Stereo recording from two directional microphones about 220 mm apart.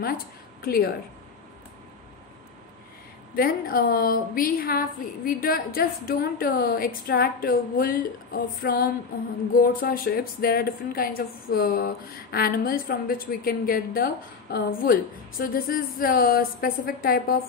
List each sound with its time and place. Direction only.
0.6 s a woman's voice: 45° left (ahead or behind)
3.3 s a woman's voice: 40° left (ahead or behind)